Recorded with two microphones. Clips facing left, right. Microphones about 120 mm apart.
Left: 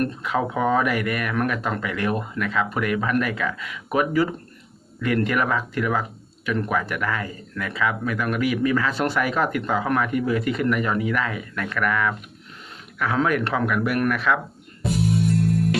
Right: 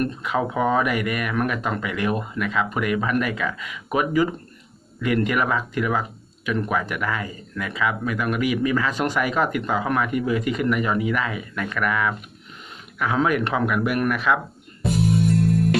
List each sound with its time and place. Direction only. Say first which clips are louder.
0.0 s speech: even; 5° right (ahead or behind)